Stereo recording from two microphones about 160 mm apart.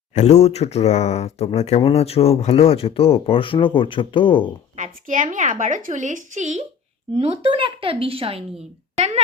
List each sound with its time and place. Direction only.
0.1 s speech: 45° left (ahead or behind)
4.8 s a woman's voice: 55° right (ahead or behind)